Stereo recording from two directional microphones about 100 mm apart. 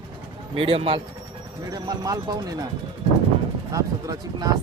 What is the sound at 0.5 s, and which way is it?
Speech, 65° right (ahead or behind).